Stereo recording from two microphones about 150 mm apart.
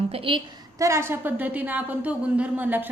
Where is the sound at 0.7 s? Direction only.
20° right (ahead or behind).